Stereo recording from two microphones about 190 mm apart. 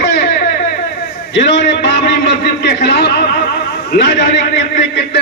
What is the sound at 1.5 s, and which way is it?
A man's voice, 65° left (ahead or behind).